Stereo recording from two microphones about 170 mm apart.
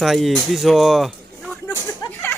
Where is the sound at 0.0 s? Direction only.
Centre (ahead or behind).